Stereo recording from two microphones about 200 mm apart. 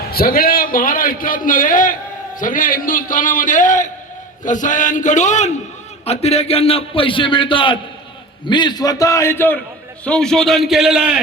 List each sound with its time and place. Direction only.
0.1 s a man's voice: 50° left (ahead or behind); by 11.2 s 5° right (ahead or behind)